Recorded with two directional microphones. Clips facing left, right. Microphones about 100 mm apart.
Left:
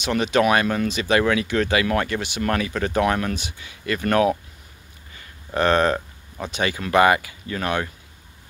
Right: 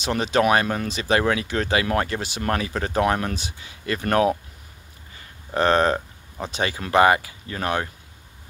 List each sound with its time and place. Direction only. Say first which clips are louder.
0.0 s speech: left 1 dB; 35° right (ahead or behind)
5.5 s speech: even; 30° right (ahead or behind)
5.9 s a sound: even; 20° right (ahead or behind)
6.5 s speech: left 1 dB; 30° right (ahead or behind)